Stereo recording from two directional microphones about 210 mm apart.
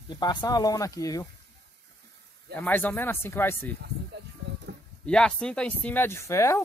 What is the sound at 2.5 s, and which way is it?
Speech, 10° left (ahead or behind).